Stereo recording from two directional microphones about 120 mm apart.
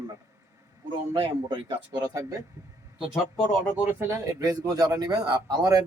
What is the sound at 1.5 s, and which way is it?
Speech, 35° right (ahead or behind).